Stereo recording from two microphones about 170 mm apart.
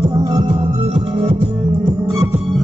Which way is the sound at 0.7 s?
35° right (ahead or behind).